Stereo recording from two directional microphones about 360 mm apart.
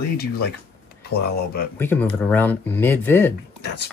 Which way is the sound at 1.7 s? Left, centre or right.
Centre.